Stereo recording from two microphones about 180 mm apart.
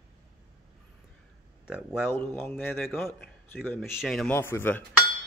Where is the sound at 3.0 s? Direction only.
Centre (ahead or behind).